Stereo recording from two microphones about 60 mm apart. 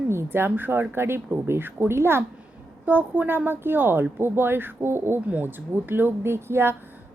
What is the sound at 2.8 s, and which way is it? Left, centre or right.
Speech, right.